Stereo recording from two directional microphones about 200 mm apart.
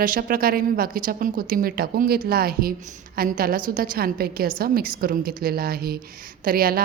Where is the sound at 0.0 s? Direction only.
45° right (ahead or behind).